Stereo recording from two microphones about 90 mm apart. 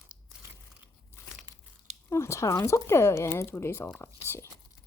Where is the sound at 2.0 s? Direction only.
30° left (ahead or behind).